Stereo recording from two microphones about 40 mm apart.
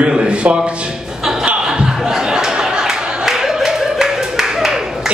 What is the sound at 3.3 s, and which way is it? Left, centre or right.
Clapping, centre.